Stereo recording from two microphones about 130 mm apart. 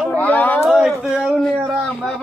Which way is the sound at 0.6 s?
5° right (ahead or behind).